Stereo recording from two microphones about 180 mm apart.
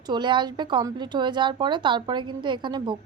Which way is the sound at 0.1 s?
25° right (ahead or behind).